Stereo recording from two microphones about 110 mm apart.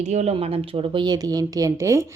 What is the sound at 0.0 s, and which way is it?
A woman's voice, 90° right.